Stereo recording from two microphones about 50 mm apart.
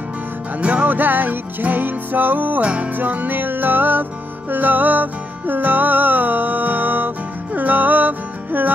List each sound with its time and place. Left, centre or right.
0.6 s music: right